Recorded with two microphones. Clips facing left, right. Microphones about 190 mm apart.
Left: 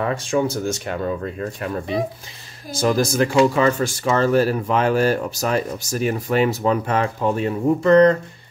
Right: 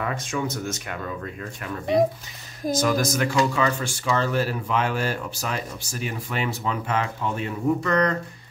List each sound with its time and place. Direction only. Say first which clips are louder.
0.0 s speech: left 7 dB; 30° left (ahead or behind)